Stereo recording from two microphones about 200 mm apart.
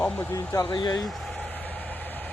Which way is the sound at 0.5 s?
20° left (ahead or behind).